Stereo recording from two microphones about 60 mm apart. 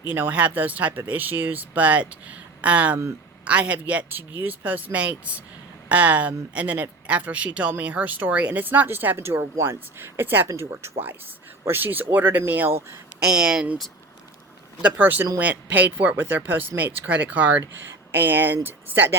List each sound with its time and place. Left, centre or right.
0.1 s speech: right
11.6 s speech: right
13.2 s speech: centre
14.8 s speech: right